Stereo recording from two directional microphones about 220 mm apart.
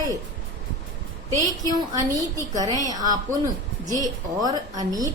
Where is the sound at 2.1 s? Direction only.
15° right (ahead or behind).